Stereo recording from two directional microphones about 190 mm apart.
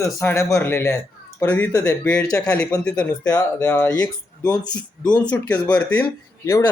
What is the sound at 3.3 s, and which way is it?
Speech, 20° left (ahead or behind).